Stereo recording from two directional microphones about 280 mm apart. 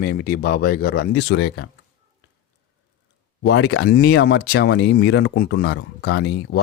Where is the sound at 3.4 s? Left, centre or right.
Left.